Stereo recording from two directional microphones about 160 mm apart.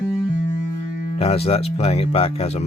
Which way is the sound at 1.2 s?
40° left (ahead or behind).